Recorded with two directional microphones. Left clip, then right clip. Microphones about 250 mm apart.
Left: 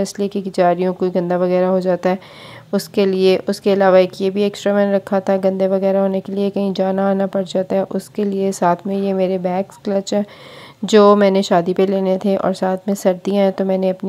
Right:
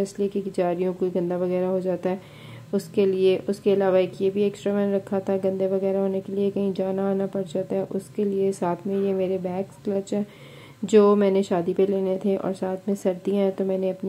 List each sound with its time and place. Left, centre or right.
0.0 s a woman's voice: left